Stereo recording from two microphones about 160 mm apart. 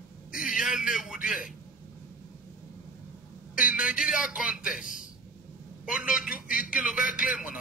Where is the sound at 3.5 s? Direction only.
5° right (ahead or behind).